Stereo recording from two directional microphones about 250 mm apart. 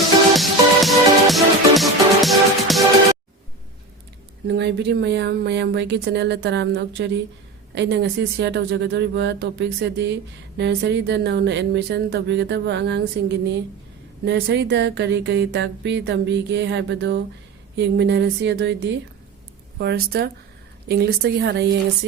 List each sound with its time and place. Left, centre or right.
0.3 s music: centre
4.4 s a woman's voice: right